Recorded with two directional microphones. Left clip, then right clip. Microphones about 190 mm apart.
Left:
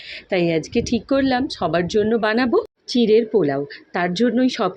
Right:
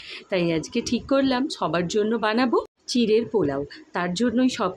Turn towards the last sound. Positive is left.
turn(degrees=15)  # may be behind; listen again after turning